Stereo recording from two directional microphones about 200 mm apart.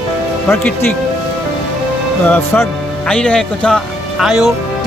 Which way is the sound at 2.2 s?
10° left (ahead or behind).